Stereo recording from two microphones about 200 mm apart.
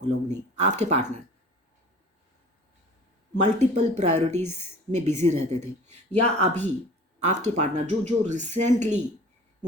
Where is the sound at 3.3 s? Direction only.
35° right (ahead or behind).